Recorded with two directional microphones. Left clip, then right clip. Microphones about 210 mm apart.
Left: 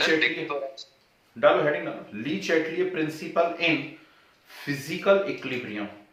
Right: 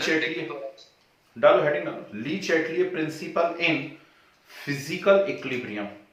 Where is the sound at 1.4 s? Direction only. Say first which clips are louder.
Right 2 dB; centre (ahead or behind).